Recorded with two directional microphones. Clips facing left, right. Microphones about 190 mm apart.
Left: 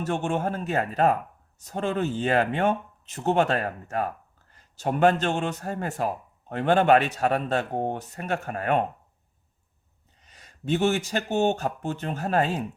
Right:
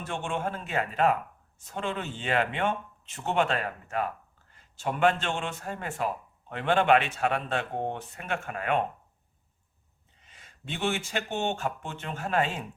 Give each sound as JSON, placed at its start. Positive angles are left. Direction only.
{"t": 0.0, "sound": "speech", "side_deg": 40}
{"t": 10.2, "sound": "speech", "side_deg": 40}